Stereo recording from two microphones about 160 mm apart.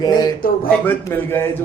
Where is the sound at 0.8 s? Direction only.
15° left (ahead or behind).